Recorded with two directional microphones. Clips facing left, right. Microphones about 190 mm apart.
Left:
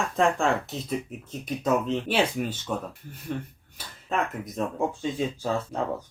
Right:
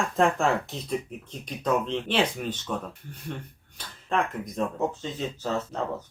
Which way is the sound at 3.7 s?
5° left (ahead or behind).